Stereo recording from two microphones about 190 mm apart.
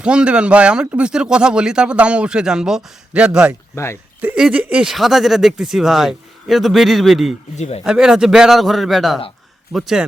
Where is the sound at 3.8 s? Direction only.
15° left (ahead or behind).